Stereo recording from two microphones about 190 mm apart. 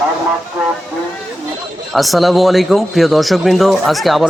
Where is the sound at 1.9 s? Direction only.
Centre (ahead or behind).